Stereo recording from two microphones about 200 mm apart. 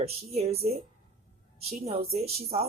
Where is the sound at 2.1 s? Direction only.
30° right (ahead or behind).